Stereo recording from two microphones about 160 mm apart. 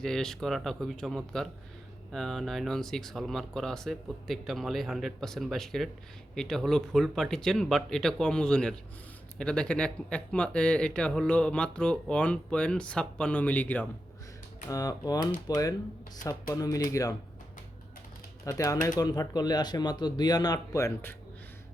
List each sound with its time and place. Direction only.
0.0 s speech: 5° left (ahead or behind)
14.7 s speech: 25° left (ahead or behind)
18.4 s speech: 20° left (ahead or behind)